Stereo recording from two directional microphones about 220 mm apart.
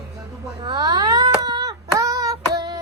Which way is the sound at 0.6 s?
20° right (ahead or behind).